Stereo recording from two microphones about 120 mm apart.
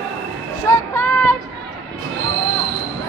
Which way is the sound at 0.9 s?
20° left (ahead or behind).